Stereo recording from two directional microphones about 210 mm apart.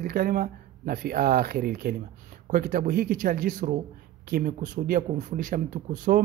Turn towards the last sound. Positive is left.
turn(degrees=-40)  # may be behind; listen again after turning